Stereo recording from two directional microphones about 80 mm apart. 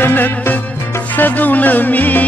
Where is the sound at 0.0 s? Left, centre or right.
Left.